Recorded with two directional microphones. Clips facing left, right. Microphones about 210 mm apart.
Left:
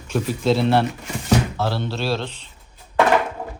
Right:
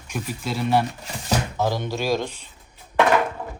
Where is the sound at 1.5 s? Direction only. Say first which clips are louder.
Even; 15° right (ahead or behind).